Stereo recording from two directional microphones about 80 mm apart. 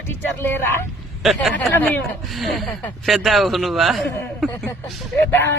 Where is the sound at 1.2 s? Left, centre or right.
Centre.